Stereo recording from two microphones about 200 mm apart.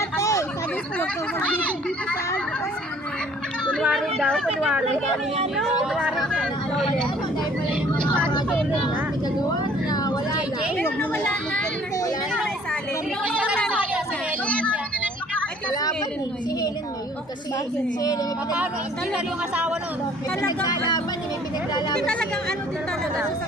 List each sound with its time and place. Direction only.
0.2 s a sound: 15° left (ahead or behind)
1.5 s a sound: 5° left (ahead or behind)
3.7 s chatter: 5° left (ahead or behind)
5.8 s speech: 5° right (ahead or behind)
8.4 s vehicle: 5° left (ahead or behind)
9.9 s vehicle: 20° left (ahead or behind)
10.8 s speech: 10° left (ahead or behind)
14.4 s a sound: 5° left (ahead or behind)
22.0 s speech: 5° left (ahead or behind)